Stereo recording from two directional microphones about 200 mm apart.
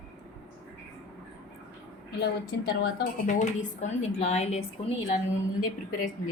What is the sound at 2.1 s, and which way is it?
A woman's voice, 55° left (ahead or behind).